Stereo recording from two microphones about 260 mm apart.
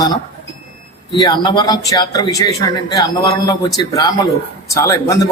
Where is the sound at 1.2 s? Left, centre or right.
Centre.